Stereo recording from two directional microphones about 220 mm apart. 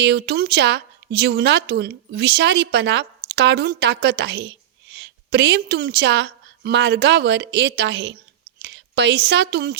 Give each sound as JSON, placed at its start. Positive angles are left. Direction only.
{"t": 0.0, "sound": "a woman's voice", "side_deg": -50}